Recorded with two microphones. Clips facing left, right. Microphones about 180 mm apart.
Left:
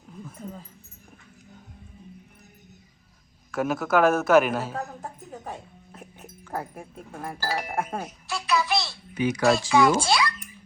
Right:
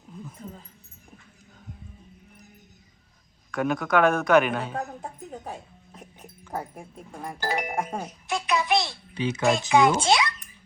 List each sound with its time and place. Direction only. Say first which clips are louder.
3.5 s speech: even; 5° left (ahead or behind)
5.9 s dog: left 1 dB; centre (ahead or behind)
7.3 s a child's voice: right 1 dB; 20° right (ahead or behind)